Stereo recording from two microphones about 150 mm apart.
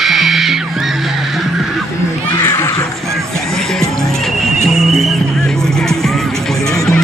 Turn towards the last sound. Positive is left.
turn(degrees=20)  # may be behind; listen again after turning